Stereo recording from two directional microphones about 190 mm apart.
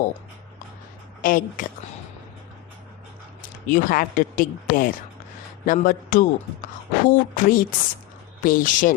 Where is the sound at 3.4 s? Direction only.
45° left (ahead or behind).